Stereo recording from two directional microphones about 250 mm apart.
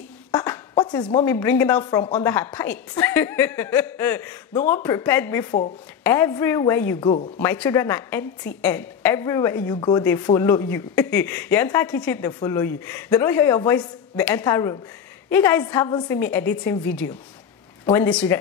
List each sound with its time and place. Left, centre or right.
0.3 s a sound: centre
1.2 s speech: centre
7.3 s speech: centre